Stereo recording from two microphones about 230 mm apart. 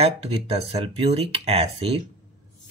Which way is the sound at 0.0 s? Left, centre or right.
Right.